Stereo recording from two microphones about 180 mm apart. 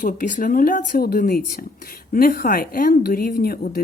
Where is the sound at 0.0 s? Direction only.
50° left (ahead or behind).